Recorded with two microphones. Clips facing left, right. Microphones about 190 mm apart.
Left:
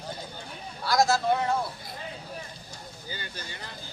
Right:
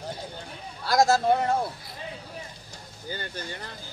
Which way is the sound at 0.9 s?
50° right (ahead or behind).